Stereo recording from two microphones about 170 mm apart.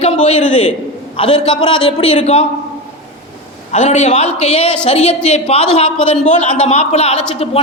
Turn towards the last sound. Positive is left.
turn(degrees=35)  # may be behind; listen again after turning